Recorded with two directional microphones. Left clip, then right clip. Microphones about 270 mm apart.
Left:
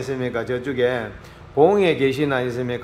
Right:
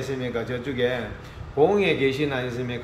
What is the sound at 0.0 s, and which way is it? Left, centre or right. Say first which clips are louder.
A man's voice: left 3 dB; centre.